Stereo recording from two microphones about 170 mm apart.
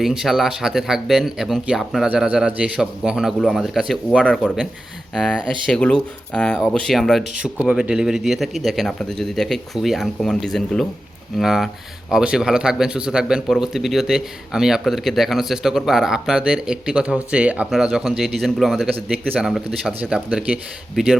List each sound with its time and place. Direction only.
0.0 s speech: centre (ahead or behind)